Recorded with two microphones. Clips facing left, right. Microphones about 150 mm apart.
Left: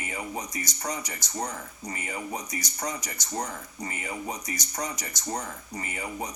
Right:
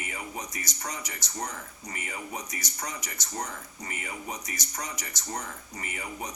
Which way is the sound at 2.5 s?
25° left (ahead or behind).